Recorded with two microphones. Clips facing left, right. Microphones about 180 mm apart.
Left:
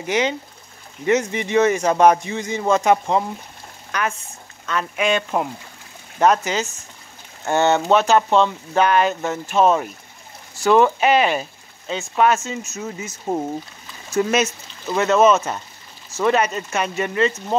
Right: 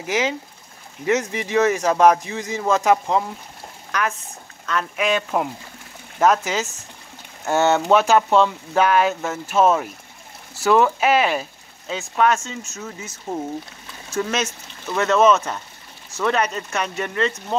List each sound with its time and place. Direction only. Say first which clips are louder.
0.0 s speech: left 2 dB; 5° right (ahead or behind)
13.3 s speech: left 4 dB; 25° left (ahead or behind)
14.1 s speech: left 5 dB; 10° left (ahead or behind)